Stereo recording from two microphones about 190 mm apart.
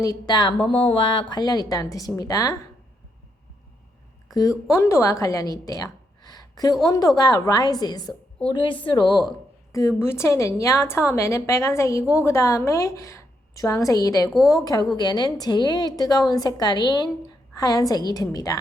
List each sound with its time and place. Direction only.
0.0 s a woman's voice: 20° left (ahead or behind)
4.3 s a woman's voice: 20° left (ahead or behind)
9.7 s a woman's voice: 15° left (ahead or behind)